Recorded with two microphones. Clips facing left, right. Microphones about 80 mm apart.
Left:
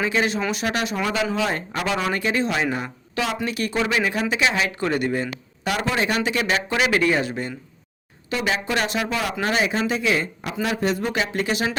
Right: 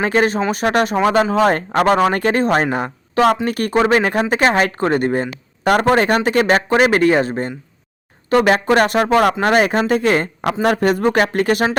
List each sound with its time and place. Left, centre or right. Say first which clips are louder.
0.0 s speech: right 6 dB; right
8.3 s speech: right 10 dB; right